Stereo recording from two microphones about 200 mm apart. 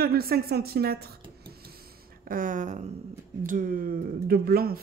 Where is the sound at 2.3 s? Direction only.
40° right (ahead or behind).